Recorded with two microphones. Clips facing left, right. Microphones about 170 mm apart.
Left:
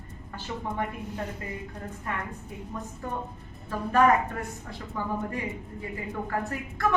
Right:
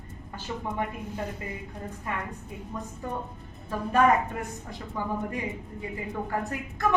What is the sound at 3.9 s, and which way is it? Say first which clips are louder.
Speech: even; 20° right (ahead or behind).